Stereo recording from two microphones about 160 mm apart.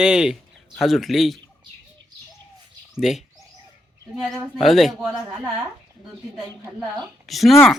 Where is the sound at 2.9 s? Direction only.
Centre (ahead or behind).